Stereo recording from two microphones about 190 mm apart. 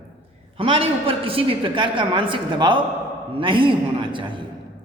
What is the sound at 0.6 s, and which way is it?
A man's voice, 30° right (ahead or behind).